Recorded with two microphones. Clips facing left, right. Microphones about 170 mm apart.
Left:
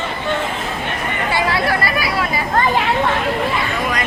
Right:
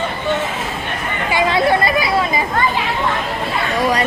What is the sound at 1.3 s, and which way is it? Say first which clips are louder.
Chatter: right 5 dB; 20° right (ahead or behind).